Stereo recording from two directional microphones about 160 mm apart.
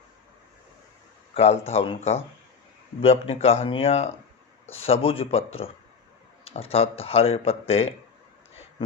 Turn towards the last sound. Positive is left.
turn(degrees=40)  # may be behind; listen again after turning